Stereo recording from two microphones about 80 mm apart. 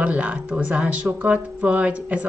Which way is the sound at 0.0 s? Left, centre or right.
Centre.